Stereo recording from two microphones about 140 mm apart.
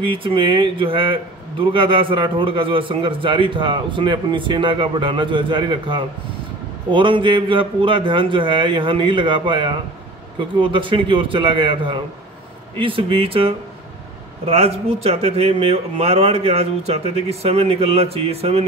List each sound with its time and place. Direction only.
0.0 s a man's voice: 40° right (ahead or behind)